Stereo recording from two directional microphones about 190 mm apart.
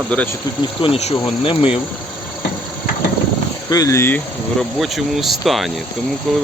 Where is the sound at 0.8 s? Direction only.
30° left (ahead or behind).